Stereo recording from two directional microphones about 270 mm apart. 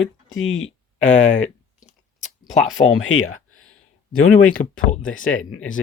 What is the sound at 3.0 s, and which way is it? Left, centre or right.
Speech, left.